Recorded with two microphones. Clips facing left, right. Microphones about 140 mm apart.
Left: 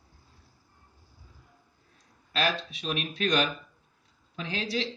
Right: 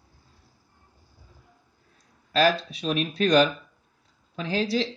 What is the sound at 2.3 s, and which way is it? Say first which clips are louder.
Speech: right 8 dB; 35° right (ahead or behind).